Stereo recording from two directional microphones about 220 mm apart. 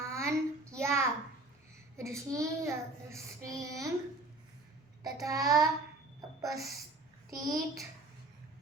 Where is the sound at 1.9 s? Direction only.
15° right (ahead or behind).